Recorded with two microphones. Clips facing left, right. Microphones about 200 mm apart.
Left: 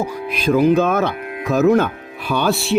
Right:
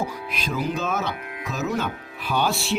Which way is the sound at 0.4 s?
60° left (ahead or behind).